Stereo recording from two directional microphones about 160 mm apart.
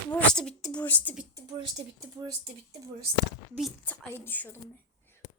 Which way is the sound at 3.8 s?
10° left (ahead or behind).